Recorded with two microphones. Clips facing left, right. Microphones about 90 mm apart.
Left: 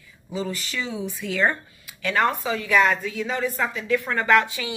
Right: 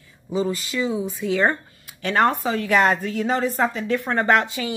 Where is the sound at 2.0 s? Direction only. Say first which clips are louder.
Right 3 dB; 40° right (ahead or behind).